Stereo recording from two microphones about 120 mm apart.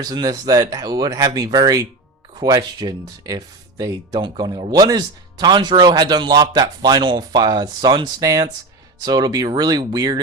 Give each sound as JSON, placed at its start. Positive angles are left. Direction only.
{"t": 0.0, "sound": "speech", "side_deg": -35}